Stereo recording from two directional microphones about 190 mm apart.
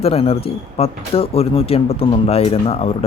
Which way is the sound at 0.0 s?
30° left (ahead or behind).